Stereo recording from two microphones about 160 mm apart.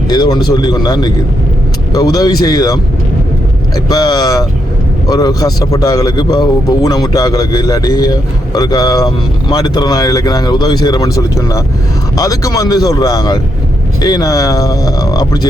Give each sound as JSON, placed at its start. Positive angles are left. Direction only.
{"t": 0.1, "sound": "speech", "side_deg": 25}
{"t": 2.1, "sound": "speech", "side_deg": 25}
{"t": 3.8, "sound": "speech", "side_deg": 25}